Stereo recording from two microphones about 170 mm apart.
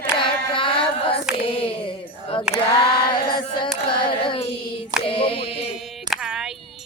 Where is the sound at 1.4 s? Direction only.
30° left (ahead or behind).